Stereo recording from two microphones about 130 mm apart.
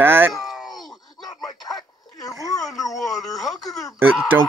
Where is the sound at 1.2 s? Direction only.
30° left (ahead or behind).